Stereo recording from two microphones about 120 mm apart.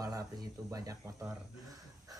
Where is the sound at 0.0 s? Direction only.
30° right (ahead or behind).